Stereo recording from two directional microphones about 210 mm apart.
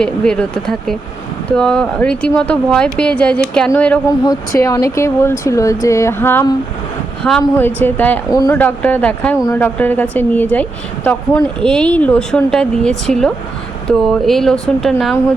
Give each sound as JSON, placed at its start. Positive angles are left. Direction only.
{"t": 0.0, "sound": "speech", "side_deg": 5}
{"t": 4.2, "sound": "a woman's voice", "side_deg": 15}
{"t": 8.3, "sound": "a woman's voice", "side_deg": 20}
{"t": 8.5, "sound": "a woman's voice", "side_deg": 5}